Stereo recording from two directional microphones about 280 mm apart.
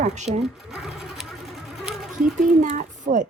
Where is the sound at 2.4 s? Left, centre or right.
Right.